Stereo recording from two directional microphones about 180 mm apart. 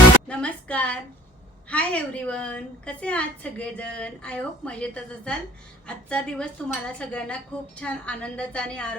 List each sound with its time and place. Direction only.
0.3 s a woman's voice: 5° left (ahead or behind)